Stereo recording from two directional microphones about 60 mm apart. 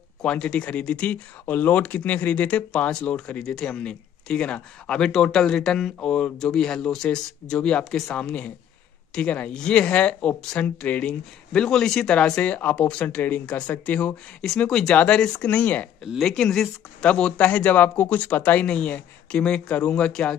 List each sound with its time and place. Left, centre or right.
0.2 s speech: centre
14.7 s speech: centre; by 15.9 s left
16.2 s speech: centre
17.0 s speech: left